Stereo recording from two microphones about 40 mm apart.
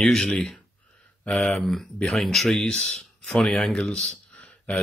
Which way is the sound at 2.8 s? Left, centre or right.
Centre.